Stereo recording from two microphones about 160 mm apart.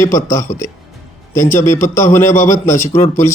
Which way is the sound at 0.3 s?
15° left (ahead or behind).